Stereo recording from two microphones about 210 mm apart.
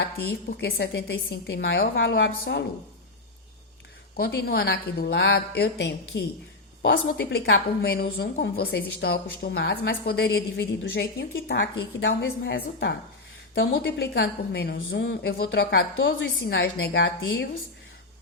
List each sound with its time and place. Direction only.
0.5 s a woman's voice: 50° left (ahead or behind)
2.4 s a woman's voice: 50° left (ahead or behind)
4.2 s a woman's voice: 50° left (ahead or behind); by 15.8 s 65° left (ahead or behind)
16.5 s a woman's voice: 50° left (ahead or behind)